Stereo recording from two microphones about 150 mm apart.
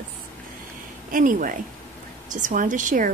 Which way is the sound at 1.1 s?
65° right (ahead or behind).